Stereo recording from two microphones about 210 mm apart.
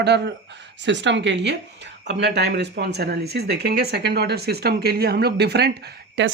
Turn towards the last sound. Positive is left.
turn(degrees=-55)  # may be behind; listen again after turning